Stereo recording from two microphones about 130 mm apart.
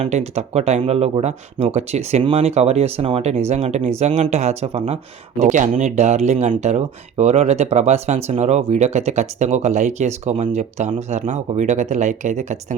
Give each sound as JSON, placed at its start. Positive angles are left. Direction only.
{"t": 0.0, "sound": "speech", "side_deg": -60}
{"t": 5.4, "sound": "speech", "side_deg": -75}